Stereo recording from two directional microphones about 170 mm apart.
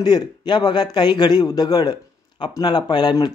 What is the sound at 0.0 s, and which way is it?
A man's voice, 25° left (ahead or behind).